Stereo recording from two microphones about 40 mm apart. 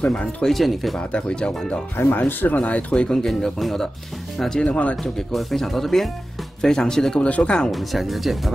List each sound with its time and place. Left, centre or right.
0.5 s speech: centre
0.9 s speech: left
2.0 s speech: left
2.5 s speech: left
3.2 s speech: centre
4.6 s speech: left
5.0 s speech: centre
7.2 s speech: left
7.7 s speech: centre